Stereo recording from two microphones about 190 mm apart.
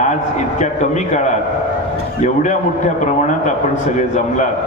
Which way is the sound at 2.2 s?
40° left (ahead or behind).